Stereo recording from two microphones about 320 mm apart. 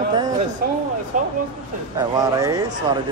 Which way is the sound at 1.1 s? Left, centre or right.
Right.